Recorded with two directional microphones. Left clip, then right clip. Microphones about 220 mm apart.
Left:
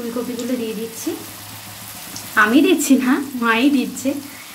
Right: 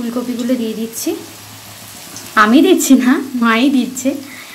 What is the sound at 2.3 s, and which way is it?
A woman's voice, 20° right (ahead or behind).